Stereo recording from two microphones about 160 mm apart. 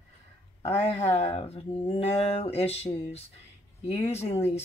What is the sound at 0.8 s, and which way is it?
Speech, 40° left (ahead or behind).